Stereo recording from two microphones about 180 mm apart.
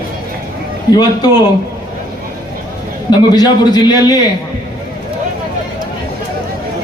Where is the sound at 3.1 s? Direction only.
20° left (ahead or behind).